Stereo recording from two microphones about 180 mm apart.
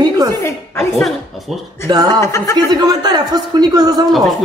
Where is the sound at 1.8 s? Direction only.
20° right (ahead or behind).